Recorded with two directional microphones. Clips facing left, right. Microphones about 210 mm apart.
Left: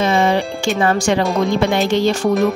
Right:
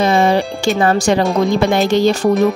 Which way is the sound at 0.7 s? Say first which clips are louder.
Right 2 dB; 35° right (ahead or behind).